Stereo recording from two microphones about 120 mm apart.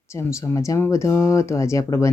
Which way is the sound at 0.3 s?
25° left (ahead or behind).